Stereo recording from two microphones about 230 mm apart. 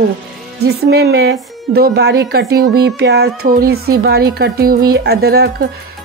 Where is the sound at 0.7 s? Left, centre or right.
Right.